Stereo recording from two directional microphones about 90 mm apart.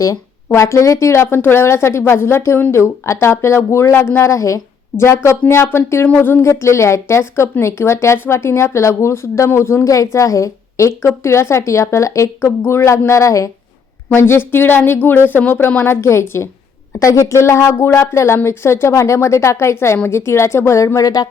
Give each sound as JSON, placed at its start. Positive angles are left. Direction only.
{"t": 0.5, "sound": "speech", "side_deg": 35}